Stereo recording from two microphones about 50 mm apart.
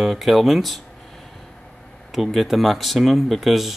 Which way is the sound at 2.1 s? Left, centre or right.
Centre.